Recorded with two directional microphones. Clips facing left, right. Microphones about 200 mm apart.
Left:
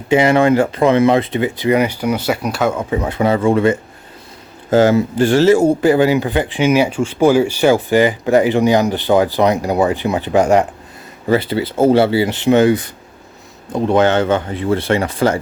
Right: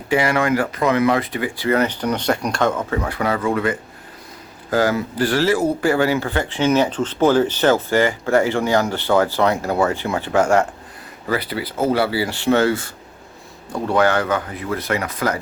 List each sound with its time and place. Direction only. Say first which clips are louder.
0.1 s speech: left 6 dB; 25° left (ahead or behind)